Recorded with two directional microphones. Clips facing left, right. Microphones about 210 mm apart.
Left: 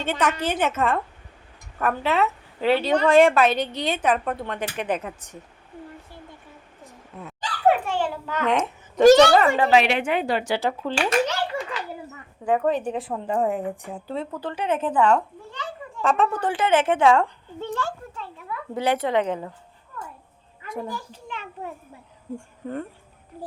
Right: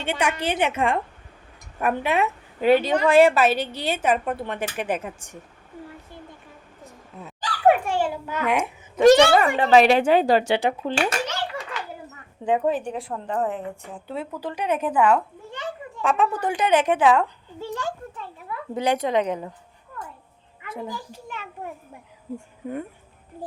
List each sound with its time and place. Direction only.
0.0 s a woman's voice: 10° right (ahead or behind)
7.7 s babbling: 10° right (ahead or behind)
9.0 s a woman's voice: 5° right (ahead or behind)
9.6 s a woman's voice: 40° right (ahead or behind)
10.4 s a woman's voice: 20° right (ahead or behind)
12.5 s a woman's voice: 15° right (ahead or behind)
12.8 s speech: 5° left (ahead or behind)
14.1 s a woman's voice: 10° right (ahead or behind)
17.0 s a woman's voice: 5° right (ahead or behind)
20.8 s a woman's voice: 10° right (ahead or behind)
22.4 s speech: 10° right (ahead or behind)